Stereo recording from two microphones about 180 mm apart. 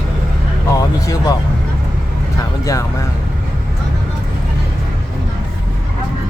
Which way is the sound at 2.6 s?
15° left (ahead or behind).